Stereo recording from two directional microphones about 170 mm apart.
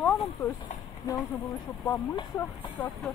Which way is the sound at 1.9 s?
15° left (ahead or behind).